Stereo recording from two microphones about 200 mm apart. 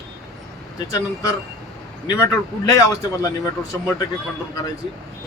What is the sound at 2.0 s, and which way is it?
A man's voice, 15° left (ahead or behind).